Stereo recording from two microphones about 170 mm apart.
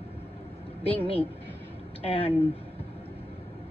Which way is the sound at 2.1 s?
35° left (ahead or behind).